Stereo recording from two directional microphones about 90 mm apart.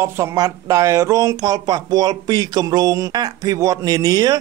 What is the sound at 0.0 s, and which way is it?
Speech, 35° right (ahead or behind).